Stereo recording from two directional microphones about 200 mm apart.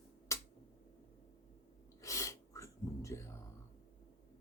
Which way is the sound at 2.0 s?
15° left (ahead or behind).